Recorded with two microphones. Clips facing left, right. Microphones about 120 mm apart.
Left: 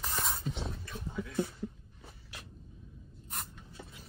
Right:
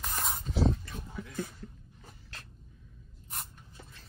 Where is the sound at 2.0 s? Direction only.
15° left (ahead or behind).